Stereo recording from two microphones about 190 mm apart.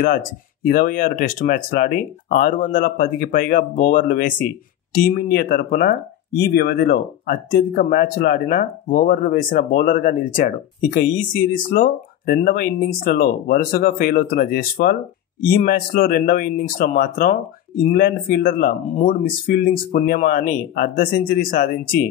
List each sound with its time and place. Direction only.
0.0 s speech: 45° left (ahead or behind)